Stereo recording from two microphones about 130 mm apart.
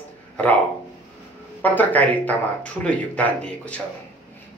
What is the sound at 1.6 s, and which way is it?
Speech, 15° left (ahead or behind).